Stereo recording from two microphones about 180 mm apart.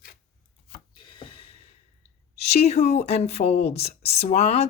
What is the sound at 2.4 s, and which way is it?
Speech, 35° left (ahead or behind).